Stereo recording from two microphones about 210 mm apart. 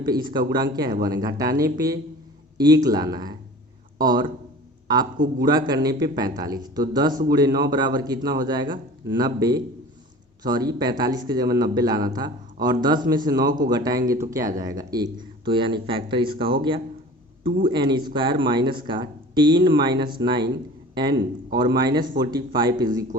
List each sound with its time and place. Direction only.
0.0 s a man's voice: 20° right (ahead or behind)